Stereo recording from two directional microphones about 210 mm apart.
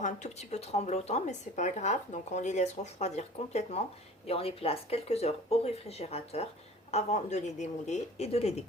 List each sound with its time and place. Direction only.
0.0 s speech: 35° left (ahead or behind)